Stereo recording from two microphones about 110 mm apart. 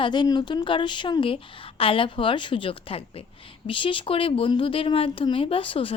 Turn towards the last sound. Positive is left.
turn(degrees=55)  # may be behind; listen again after turning